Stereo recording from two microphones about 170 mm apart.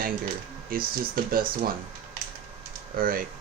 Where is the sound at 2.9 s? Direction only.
60° right (ahead or behind).